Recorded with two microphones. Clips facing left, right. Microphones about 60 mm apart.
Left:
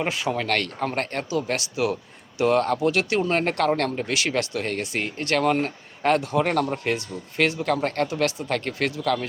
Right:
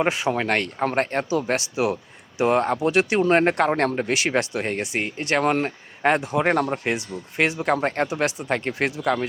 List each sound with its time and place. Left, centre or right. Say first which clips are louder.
0.0 s speech: right 3 dB; right